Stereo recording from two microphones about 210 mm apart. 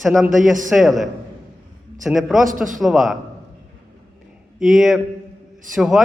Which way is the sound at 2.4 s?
40° right (ahead or behind).